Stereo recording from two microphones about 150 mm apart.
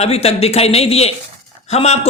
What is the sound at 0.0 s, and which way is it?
A man's voice, 45° left (ahead or behind).